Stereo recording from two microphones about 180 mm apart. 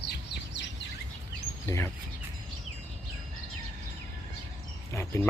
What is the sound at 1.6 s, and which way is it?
Speech, 15° left (ahead or behind).